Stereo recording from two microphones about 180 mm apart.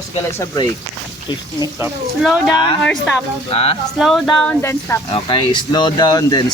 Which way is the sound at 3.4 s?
30° left (ahead or behind).